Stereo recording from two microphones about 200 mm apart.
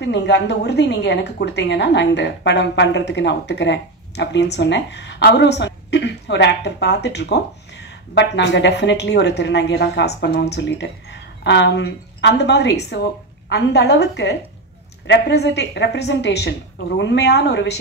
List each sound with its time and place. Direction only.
0.0 s a woman's voice: 60° left (ahead or behind)